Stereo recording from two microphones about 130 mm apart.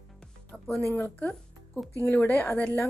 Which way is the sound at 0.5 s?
5° left (ahead or behind).